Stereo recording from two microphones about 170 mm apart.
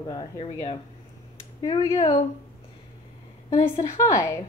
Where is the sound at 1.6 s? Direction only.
20° left (ahead or behind).